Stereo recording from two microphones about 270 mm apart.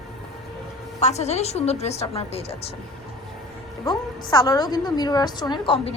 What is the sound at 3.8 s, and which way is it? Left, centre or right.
A woman's voice, centre.